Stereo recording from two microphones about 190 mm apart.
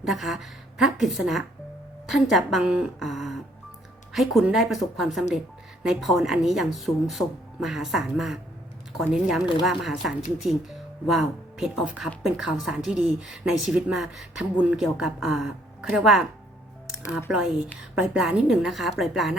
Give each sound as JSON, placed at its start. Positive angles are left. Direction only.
{"t": 0.0, "sound": "speech", "side_deg": 0}
{"t": 17.9, "sound": "speech", "side_deg": -5}